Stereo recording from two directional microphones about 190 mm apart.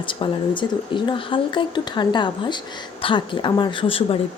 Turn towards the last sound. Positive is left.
turn(degrees=30)  # may be behind; listen again after turning